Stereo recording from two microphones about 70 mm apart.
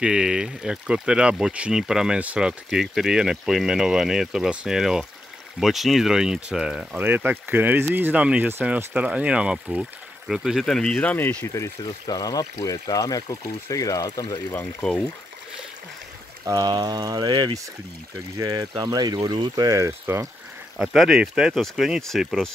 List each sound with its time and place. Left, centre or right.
0.0 s speech: centre
2.7 s speech: centre
7.0 s speech: right; by 10.6 s centre
10.6 s speech: centre
11.4 s speech: left
11.8 s speech: left
14.8 s speech: centre
16.4 s speech: right
18.4 s speech: right
20.1 s speech: right
21.4 s speech: centre